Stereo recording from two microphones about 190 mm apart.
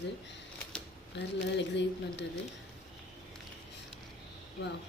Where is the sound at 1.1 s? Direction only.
65° left (ahead or behind).